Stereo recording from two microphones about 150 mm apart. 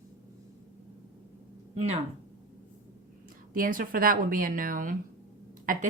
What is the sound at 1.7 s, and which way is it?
Speech, 45° right (ahead or behind).